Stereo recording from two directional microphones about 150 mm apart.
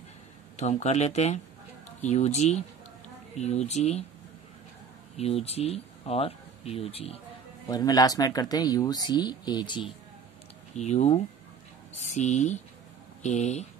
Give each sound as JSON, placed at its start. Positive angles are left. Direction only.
{"t": 0.6, "sound": "speech", "side_deg": 50}
{"t": 5.1, "sound": "speech", "side_deg": 45}
{"t": 7.6, "sound": "speech", "side_deg": 25}
{"t": 10.8, "sound": "speech", "side_deg": 50}